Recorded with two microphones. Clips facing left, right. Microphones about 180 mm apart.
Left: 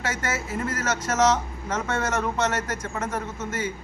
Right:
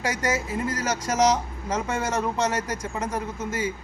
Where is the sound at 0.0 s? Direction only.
15° right (ahead or behind).